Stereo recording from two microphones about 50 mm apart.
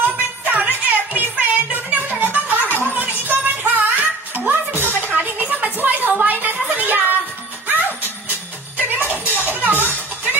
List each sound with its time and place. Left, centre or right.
0.0 s music: right
5.6 s a sound: right
8.8 s music: right